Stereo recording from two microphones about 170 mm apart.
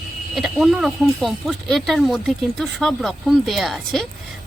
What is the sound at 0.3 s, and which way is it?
Speech, centre (ahead or behind).